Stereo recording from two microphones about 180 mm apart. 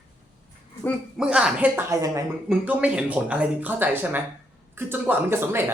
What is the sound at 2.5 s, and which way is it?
Speech, 5° right (ahead or behind).